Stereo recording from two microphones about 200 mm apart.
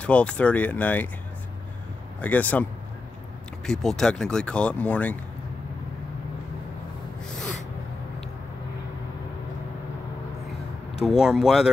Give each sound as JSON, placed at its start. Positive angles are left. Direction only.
{"t": 0.0, "sound": "speech", "side_deg": 5}
{"t": 2.2, "sound": "speech", "side_deg": 10}
{"t": 11.1, "sound": "speech", "side_deg": 0}